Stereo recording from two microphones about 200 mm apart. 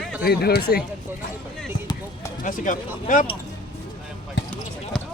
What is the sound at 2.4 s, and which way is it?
Speech, 40° left (ahead or behind).